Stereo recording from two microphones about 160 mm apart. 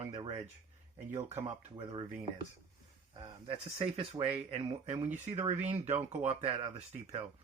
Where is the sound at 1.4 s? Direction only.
35° right (ahead or behind).